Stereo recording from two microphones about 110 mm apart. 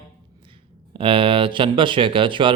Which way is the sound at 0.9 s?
55° right (ahead or behind).